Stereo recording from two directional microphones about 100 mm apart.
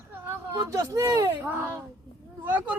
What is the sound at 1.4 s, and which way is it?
Speech, 20° right (ahead or behind).